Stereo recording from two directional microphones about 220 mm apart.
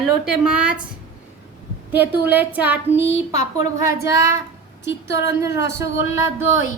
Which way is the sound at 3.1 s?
30° left (ahead or behind).